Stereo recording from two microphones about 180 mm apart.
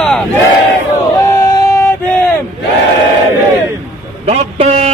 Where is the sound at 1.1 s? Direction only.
20° left (ahead or behind).